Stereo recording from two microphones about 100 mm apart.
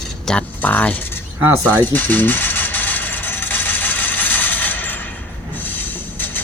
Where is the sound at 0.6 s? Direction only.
15° left (ahead or behind).